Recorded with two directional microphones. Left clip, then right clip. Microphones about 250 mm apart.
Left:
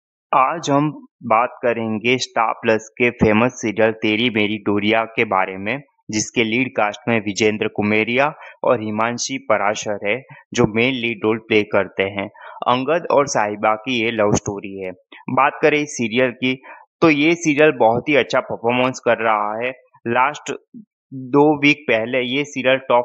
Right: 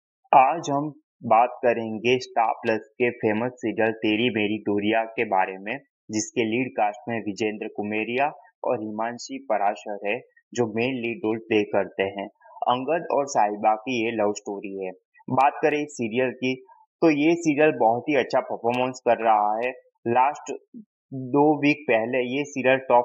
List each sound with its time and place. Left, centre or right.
0.3 s speech: centre; by 14.6 s left
14.6 s speech: centre